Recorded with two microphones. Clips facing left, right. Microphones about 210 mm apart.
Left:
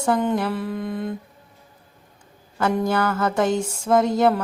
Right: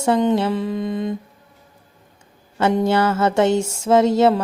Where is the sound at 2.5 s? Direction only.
25° right (ahead or behind).